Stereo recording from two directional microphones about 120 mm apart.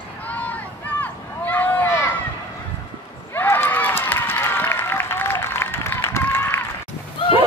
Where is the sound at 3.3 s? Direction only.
20° left (ahead or behind).